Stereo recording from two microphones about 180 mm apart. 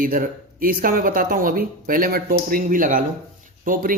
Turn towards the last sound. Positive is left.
turn(degrees=-45)  # may be behind; listen again after turning